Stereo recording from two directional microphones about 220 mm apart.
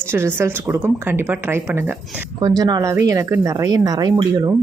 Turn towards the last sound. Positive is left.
turn(degrees=-20)  # may be behind; listen again after turning